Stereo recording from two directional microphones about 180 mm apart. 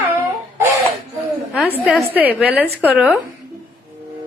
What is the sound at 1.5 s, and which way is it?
A woman's voice, centre (ahead or behind).